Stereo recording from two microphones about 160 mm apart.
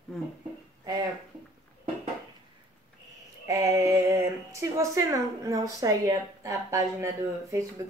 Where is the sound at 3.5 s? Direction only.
20° right (ahead or behind).